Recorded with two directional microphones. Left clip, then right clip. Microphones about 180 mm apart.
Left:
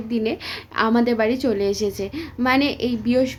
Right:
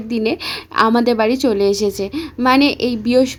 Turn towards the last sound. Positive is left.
turn(degrees=-40)  # may be behind; listen again after turning